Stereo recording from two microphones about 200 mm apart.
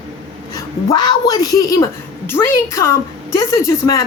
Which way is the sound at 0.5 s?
20° left (ahead or behind).